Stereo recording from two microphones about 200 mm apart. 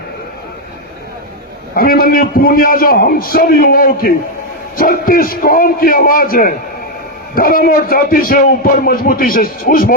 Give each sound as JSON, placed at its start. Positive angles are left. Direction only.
{"t": 1.7, "sound": "a man's voice", "side_deg": 45}